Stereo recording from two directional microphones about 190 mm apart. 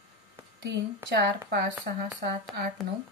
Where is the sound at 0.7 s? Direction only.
65° right (ahead or behind).